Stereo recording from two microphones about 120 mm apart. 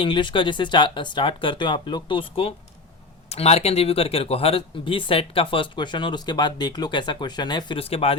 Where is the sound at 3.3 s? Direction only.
60° left (ahead or behind); by 7.8 s 35° left (ahead or behind).